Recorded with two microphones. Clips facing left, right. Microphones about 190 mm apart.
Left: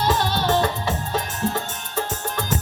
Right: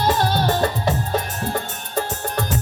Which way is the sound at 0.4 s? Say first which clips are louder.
Right 1 dB; 40° right (ahead or behind).